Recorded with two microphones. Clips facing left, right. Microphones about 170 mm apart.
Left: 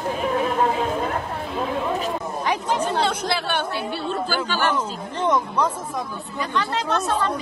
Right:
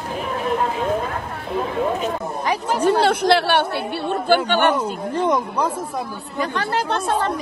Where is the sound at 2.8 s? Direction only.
65° right (ahead or behind).